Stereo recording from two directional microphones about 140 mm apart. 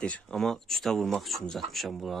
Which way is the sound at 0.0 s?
5° left (ahead or behind).